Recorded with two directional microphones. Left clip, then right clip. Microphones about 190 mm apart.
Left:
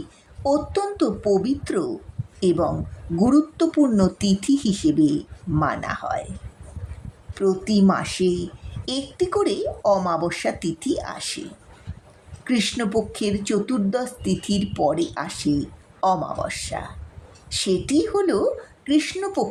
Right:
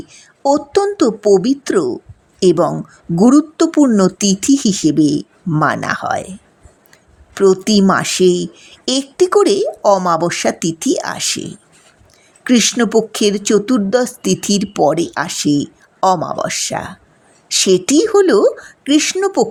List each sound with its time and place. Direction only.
0.4 s speech: 35° right (ahead or behind)
7.3 s speech: 45° right (ahead or behind)
12.5 s speech: 40° right (ahead or behind)